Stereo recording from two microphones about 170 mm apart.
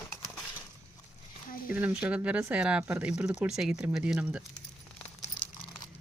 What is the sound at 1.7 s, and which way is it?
Speech, 10° right (ahead or behind).